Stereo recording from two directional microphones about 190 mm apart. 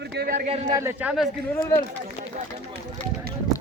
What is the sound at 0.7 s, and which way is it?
Speech, 15° right (ahead or behind).